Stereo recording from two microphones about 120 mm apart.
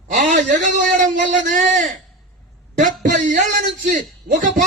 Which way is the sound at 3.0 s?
90° right.